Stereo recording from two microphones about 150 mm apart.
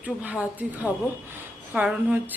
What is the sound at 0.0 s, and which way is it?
A woman's voice, 10° right (ahead or behind).